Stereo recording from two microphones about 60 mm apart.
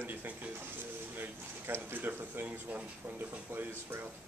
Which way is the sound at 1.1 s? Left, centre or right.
Right.